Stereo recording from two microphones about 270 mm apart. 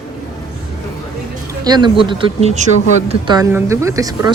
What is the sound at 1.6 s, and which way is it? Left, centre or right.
Speech, centre.